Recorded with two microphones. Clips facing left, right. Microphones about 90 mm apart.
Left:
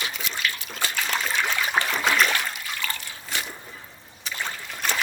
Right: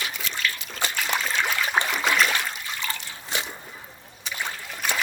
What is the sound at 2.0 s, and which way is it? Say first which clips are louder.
Water: left 1 dB; centre (ahead or behind).